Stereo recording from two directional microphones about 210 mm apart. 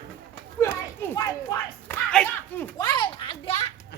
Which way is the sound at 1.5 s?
15° left (ahead or behind).